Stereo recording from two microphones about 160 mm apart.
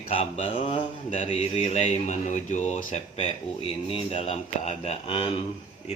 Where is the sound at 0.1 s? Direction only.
35° left (ahead or behind).